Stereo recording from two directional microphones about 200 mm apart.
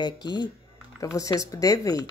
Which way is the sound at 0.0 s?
20° left (ahead or behind).